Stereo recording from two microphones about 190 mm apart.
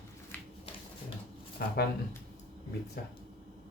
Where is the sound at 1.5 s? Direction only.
55° left (ahead or behind).